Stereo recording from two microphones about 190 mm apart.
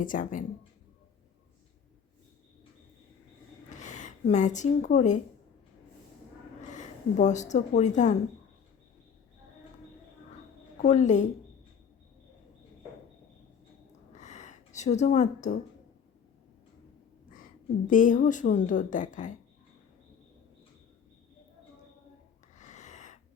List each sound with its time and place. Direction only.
0.0 s a woman's voice: 45° left (ahead or behind)
3.7 s speech: 40° left (ahead or behind)
6.7 s speech: 40° left (ahead or behind)
10.8 s speech: 35° left (ahead or behind)
14.1 s a sound: 40° left (ahead or behind)
17.3 s a woman's voice: 45° left (ahead or behind)
22.5 s a sound: 40° left (ahead or behind)